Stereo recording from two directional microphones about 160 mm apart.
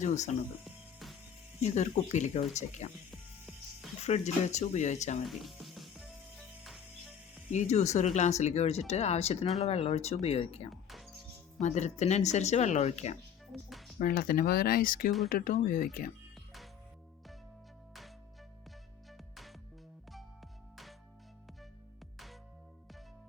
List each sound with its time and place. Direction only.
0.0 s speech: 50° left (ahead or behind)
0.6 s music: centre (ahead or behind)
1.6 s speech: 45° left (ahead or behind)
3.1 s music: centre (ahead or behind)
4.0 s speech: 45° left (ahead or behind)
5.3 s music: centre (ahead or behind)
7.5 s speech: 45° left (ahead or behind)
10.7 s music: centre (ahead or behind)
11.6 s speech: 45° left (ahead or behind)
13.5 s music: centre (ahead or behind)
14.0 s speech: 65° left (ahead or behind)
16.3 s music: centre (ahead or behind)
19.1 s music: centre (ahead or behind)